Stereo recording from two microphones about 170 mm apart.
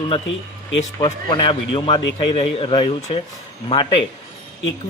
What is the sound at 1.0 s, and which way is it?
A man's voice, 30° left (ahead or behind).